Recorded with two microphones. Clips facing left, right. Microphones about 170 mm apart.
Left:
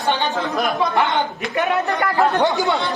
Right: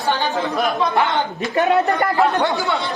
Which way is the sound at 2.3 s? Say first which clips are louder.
Left 1 dB; 15° left (ahead or behind).